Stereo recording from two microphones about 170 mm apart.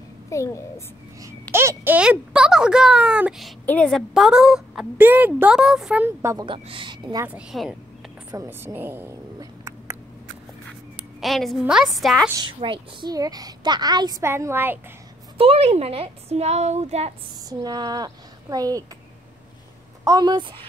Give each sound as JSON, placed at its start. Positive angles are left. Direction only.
{"t": 0.3, "sound": "a child's voice", "side_deg": 15}
{"t": 1.5, "sound": "a woman's voice", "side_deg": -15}
{"t": 6.4, "sound": "a woman's voice", "side_deg": -30}
{"t": 7.2, "sound": "a woman's voice", "side_deg": -5}
{"t": 8.3, "sound": "a sound", "side_deg": -10}
{"t": 11.1, "sound": "a woman's voice", "side_deg": 0}
{"t": 12.5, "sound": "a woman's voice", "side_deg": -30}
{"t": 14.3, "sound": "a woman's voice", "side_deg": -15}
{"t": 15.3, "sound": "a woman's voice", "side_deg": -35}
{"t": 17.5, "sound": "a woman's voice", "side_deg": -25}
{"t": 20.1, "sound": "a woman's voice", "side_deg": -25}